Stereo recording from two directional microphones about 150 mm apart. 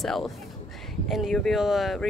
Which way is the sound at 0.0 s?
Centre (ahead or behind).